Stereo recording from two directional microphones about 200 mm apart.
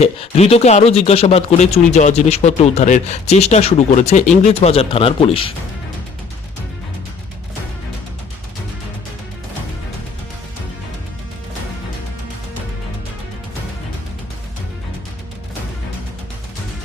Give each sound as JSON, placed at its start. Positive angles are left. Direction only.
{"t": 0.0, "sound": "speech", "side_deg": 30}